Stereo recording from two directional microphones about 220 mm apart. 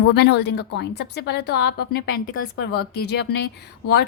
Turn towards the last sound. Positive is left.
turn(degrees=50)  # may be behind; listen again after turning